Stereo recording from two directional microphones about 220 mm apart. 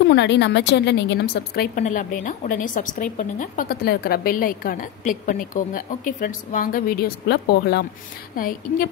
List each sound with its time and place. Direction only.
0.1 s a woman's voice: 50° left (ahead or behind)